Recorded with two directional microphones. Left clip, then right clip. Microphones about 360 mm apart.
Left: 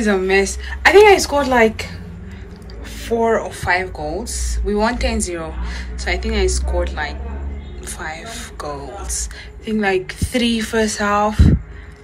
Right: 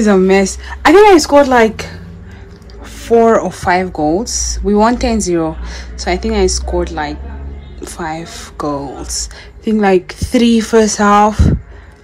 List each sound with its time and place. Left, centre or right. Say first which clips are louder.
0.0 s speech: right 5 dB; right
3.0 s speech: right 8 dB; right